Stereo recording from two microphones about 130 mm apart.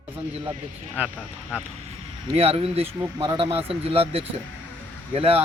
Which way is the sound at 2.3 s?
50° right (ahead or behind).